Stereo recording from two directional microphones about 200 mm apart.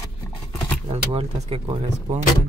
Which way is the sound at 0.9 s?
30° right (ahead or behind).